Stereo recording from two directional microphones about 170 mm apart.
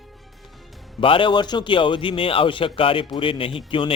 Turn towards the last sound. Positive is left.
turn(degrees=30)  # may be behind; listen again after turning